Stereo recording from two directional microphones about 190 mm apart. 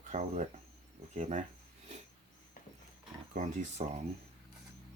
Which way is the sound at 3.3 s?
40° right (ahead or behind).